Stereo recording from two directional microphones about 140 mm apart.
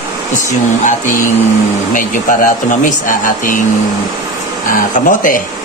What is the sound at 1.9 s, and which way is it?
Speech, 70° left (ahead or behind).